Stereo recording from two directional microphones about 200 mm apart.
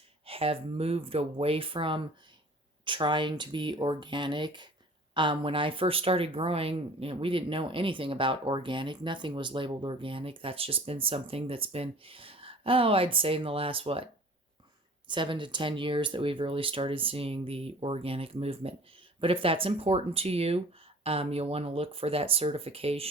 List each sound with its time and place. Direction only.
0.3 s speech: 30° right (ahead or behind)